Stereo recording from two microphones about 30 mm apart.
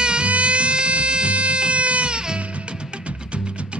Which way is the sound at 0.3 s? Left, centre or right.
Right.